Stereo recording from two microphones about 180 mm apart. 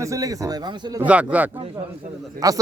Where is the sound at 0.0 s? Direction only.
20° right (ahead or behind).